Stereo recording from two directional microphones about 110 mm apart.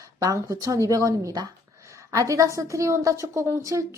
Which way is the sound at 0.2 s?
30° right (ahead or behind).